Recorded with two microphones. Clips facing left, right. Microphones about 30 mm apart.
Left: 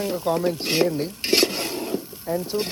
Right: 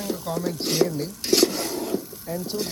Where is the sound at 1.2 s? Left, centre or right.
Left.